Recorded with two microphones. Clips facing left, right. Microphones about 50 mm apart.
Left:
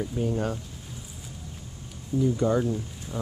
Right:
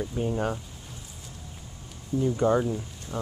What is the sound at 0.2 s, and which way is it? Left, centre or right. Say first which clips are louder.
Speech: even; right.